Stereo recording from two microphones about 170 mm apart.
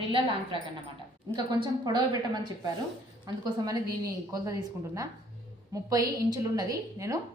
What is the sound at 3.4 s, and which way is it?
A woman's voice, 20° right (ahead or behind).